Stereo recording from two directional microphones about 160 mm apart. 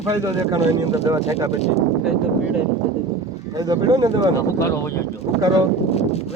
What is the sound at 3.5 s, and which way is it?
Speech, 25° right (ahead or behind).